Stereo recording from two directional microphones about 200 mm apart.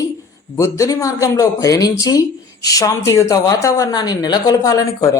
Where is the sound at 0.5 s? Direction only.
15° left (ahead or behind).